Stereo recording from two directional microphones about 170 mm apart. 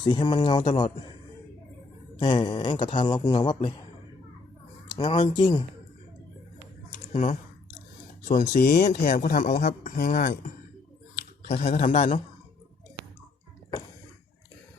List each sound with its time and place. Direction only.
0.0 s speech: 25° left (ahead or behind)
2.1 s speech: 25° left (ahead or behind)
4.9 s speech: 25° left (ahead or behind)
7.1 s speech: 45° left (ahead or behind)
11.4 s speech: 40° left (ahead or behind)